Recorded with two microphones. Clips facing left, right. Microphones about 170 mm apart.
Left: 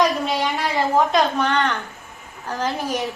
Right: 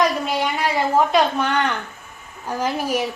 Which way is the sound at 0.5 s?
Centre (ahead or behind).